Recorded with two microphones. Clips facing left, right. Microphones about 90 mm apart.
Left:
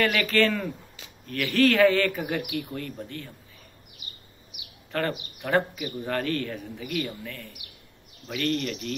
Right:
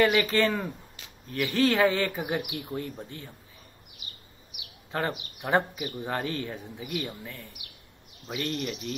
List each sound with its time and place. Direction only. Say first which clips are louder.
0.0 s speech: even; 20° right (ahead or behind)
4.9 s speech: left 2 dB; 20° right (ahead or behind)